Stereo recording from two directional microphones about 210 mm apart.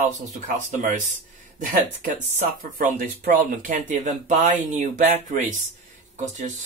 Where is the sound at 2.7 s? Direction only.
40° right (ahead or behind).